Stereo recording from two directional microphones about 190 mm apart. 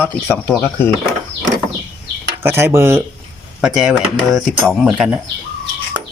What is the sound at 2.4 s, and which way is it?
Speech, 15° right (ahead or behind).